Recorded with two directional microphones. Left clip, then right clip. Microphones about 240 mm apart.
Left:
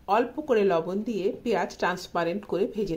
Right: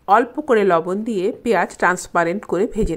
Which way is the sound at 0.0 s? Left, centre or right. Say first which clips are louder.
Right 9 dB; right.